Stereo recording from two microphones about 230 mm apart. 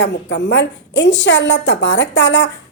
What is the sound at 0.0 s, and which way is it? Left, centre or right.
A woman's voice, left.